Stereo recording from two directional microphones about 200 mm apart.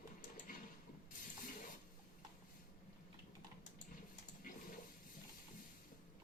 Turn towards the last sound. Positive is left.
turn(degrees=40)  # may be behind; listen again after turning